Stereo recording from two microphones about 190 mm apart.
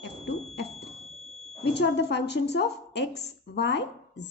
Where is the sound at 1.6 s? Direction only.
65° left (ahead or behind).